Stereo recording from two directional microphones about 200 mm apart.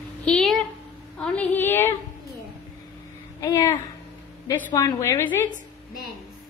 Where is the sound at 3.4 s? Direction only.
15° left (ahead or behind).